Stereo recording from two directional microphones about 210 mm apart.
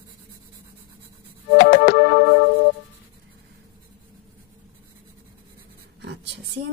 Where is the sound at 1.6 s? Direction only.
40° left (ahead or behind).